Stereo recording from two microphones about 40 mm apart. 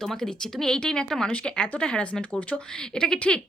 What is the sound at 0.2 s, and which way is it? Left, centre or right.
A woman's voice, centre.